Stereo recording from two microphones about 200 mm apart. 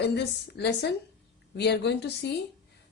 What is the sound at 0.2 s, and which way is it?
Speech, 55° left (ahead or behind).